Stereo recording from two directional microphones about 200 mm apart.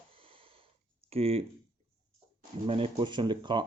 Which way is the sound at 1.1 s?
30° right (ahead or behind).